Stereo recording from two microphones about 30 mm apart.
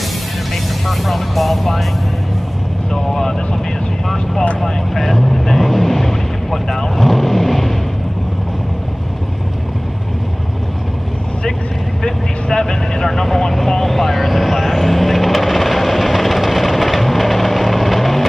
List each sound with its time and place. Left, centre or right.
0.8 s speech: centre
2.9 s vehicle: centre
4.6 s vehicle: centre
12.0 s vehicle: centre